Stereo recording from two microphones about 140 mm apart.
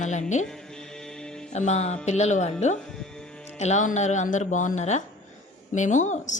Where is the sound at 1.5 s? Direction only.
55° left (ahead or behind).